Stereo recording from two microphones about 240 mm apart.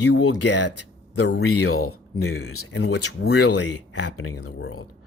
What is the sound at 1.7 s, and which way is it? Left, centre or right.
Speech, left.